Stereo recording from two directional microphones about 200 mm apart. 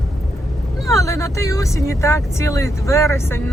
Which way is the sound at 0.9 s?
15° left (ahead or behind).